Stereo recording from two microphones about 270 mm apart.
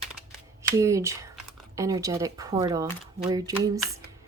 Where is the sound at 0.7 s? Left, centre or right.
Centre.